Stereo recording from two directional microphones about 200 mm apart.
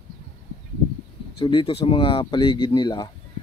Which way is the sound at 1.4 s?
25° left (ahead or behind).